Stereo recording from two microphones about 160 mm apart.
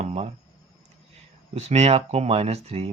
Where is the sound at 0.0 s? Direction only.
40° right (ahead or behind).